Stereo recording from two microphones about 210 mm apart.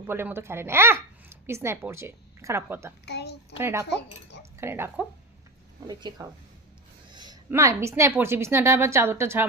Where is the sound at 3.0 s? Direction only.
50° left (ahead or behind).